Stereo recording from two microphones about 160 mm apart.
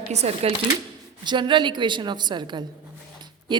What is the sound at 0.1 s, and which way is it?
Speech, 40° right (ahead or behind).